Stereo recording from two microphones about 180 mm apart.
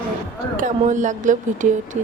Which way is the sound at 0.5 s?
45° right (ahead or behind).